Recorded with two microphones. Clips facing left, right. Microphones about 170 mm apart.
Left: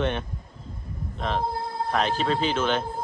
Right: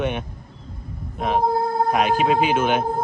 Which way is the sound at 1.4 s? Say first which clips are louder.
Right 9 dB; 50° right (ahead or behind).